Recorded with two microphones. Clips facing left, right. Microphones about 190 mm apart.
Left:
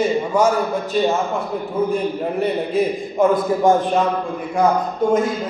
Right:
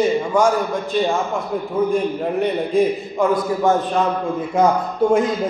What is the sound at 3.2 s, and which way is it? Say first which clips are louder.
Speech: left 2 dB; 20° left (ahead or behind).